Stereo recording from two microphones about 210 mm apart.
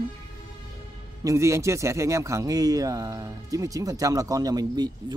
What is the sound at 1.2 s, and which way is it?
A man's voice, 15° right (ahead or behind).